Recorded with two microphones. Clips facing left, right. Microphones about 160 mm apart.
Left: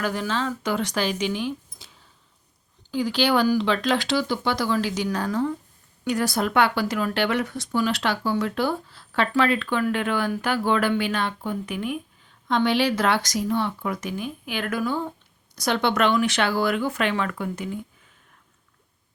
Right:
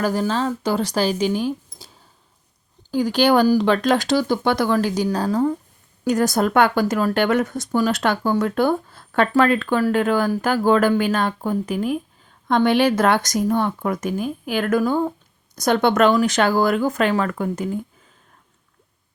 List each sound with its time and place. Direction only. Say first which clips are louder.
0.0 s speech: right 5 dB; 40° right (ahead or behind)
5.0 s speech: right 5 dB; 35° right (ahead or behind)
12.5 s speech: right 5 dB; 50° right (ahead or behind)